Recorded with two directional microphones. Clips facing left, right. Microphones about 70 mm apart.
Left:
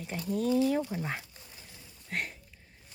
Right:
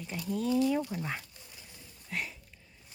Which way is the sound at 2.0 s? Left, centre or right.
Left.